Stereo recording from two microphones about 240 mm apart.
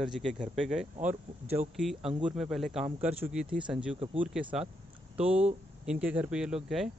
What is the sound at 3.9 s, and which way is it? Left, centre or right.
Speech, right.